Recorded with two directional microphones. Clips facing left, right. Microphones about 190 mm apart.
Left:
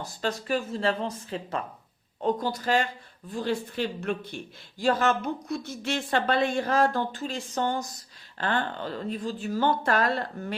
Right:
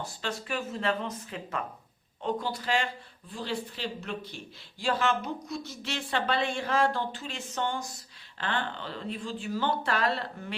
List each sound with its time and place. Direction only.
0.0 s a woman's voice: 40° left (ahead or behind)